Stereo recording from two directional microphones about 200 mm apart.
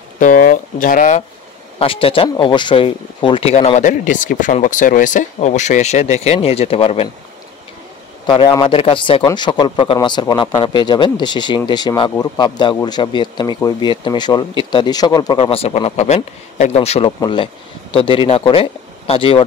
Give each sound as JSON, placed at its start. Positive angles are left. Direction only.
{"t": 0.2, "sound": "speech", "side_deg": 40}
{"t": 1.8, "sound": "speech", "side_deg": 25}
{"t": 8.3, "sound": "speech", "side_deg": 25}